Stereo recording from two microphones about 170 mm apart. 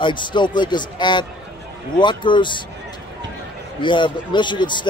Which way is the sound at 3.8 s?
30° left (ahead or behind).